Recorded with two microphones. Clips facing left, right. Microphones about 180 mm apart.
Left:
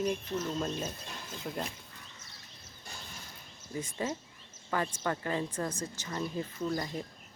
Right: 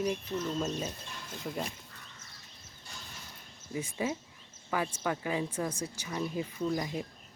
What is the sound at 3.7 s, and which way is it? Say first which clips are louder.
Speech: right 2 dB; 10° right (ahead or behind).